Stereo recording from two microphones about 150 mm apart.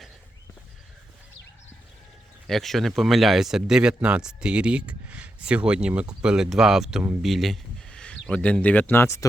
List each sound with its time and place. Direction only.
2.5 s speech: centre (ahead or behind)
7.3 s speech: centre (ahead or behind); by 9.2 s 15° left (ahead or behind)